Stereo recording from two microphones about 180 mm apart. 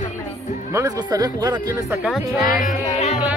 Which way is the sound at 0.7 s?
20° right (ahead or behind).